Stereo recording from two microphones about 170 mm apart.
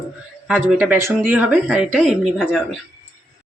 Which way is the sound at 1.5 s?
Centre (ahead or behind).